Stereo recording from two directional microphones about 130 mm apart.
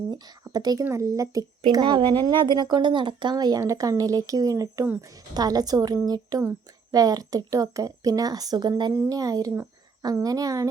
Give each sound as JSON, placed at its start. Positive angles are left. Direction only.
{"t": 0.1, "sound": "speech", "side_deg": -30}